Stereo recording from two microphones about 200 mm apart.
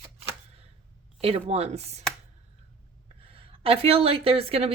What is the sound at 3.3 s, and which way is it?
A woman's voice, 30° right (ahead or behind).